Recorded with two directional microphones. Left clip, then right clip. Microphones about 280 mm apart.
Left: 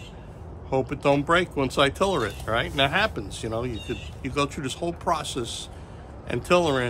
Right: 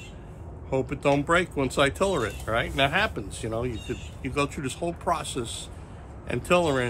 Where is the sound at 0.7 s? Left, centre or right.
Centre.